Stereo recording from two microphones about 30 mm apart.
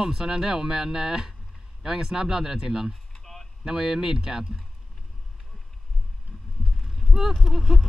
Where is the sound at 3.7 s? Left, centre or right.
Centre.